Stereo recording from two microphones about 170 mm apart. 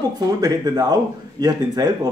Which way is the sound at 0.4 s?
20° right (ahead or behind).